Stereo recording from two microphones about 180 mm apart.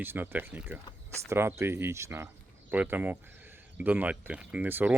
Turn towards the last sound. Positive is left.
turn(degrees=-10)  # may be behind; listen again after turning